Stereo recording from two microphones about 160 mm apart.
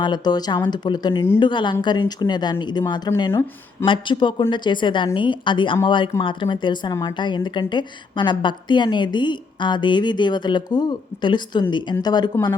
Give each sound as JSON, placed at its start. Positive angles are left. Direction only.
{"t": 0.0, "sound": "a woman's voice", "side_deg": 25}